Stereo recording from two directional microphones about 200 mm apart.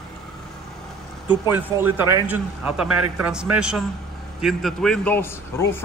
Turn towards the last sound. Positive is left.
turn(degrees=10)  # may be behind; listen again after turning